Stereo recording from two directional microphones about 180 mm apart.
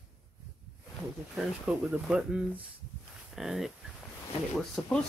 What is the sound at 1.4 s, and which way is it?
Speech, 5° right (ahead or behind).